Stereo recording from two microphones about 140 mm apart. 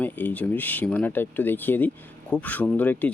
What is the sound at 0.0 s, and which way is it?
Speech, 10° left (ahead or behind).